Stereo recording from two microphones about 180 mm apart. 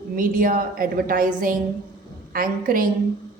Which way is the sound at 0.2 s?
50° right (ahead or behind).